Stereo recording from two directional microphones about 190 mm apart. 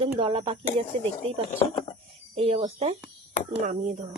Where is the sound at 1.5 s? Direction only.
30° left (ahead or behind).